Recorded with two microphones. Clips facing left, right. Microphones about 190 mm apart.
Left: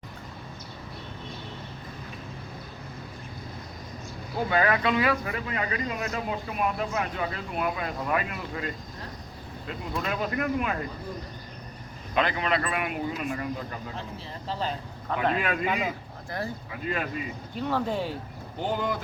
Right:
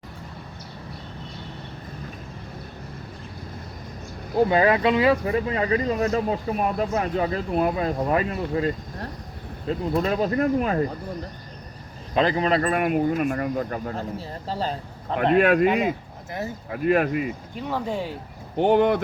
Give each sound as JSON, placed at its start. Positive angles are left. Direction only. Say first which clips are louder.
{"t": 4.4, "sound": "speech", "louder": "right 4 dB", "side_deg": -25}
{"t": 12.1, "sound": "speech", "louder": "right 5 dB", "side_deg": -35}
{"t": 15.4, "sound": "speech", "louder": "right 11 dB", "side_deg": -65}
{"t": 15.6, "sound": "speech", "louder": "right 8 dB", "side_deg": -20}
{"t": 17.6, "sound": "speech", "louder": "even", "side_deg": -10}
{"t": 18.5, "sound": "speech", "louder": "right 11 dB", "side_deg": -65}